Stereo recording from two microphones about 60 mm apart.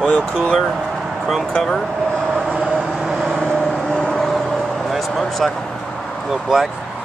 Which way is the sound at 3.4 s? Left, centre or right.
Centre.